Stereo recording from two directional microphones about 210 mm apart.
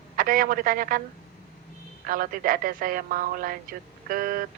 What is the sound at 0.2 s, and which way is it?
Speech, 40° right (ahead or behind).